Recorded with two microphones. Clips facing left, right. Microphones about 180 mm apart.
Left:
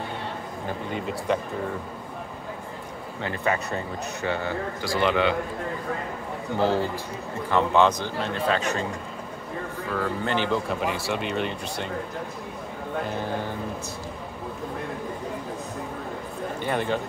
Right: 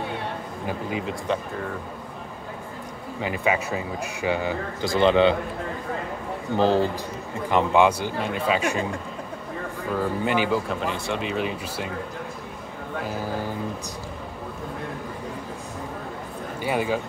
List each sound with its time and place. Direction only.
0.7 s speech: 5° right (ahead or behind)
3.2 s a man's voice: 10° right (ahead or behind); by 5.3 s 25° right (ahead or behind)
6.5 s a man's voice: 15° right (ahead or behind)
9.9 s speech: 10° right (ahead or behind)
13.0 s speech: 5° right (ahead or behind)
16.6 s a man's voice: 5° right (ahead or behind)